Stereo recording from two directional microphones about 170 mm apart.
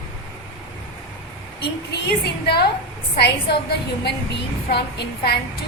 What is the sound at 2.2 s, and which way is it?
A woman's voice, 70° left (ahead or behind).